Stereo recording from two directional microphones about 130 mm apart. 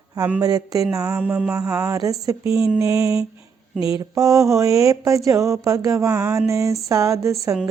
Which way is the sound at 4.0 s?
25° right (ahead or behind).